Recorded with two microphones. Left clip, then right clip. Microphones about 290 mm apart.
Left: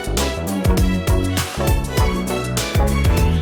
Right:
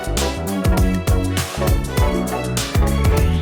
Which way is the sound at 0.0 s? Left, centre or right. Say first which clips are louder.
Even; centre.